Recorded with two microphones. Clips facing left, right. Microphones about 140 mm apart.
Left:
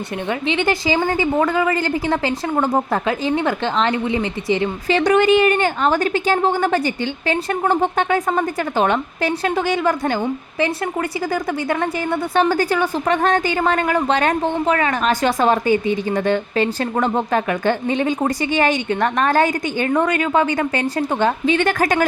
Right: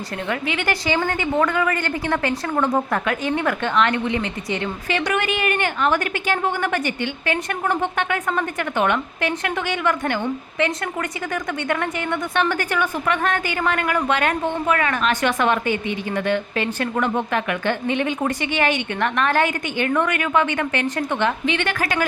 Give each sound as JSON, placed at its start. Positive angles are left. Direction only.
{"t": 0.3, "sound": "a woman's voice", "side_deg": 25}
{"t": 11.7, "sound": "a woman's voice", "side_deg": 35}